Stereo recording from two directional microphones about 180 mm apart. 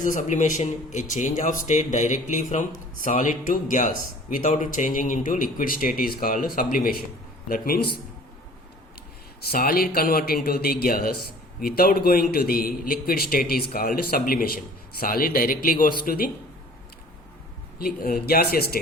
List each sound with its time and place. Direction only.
0.0 s speech: 45° left (ahead or behind)
9.5 s a man's voice: 55° left (ahead or behind)
17.7 s a man's voice: 55° left (ahead or behind)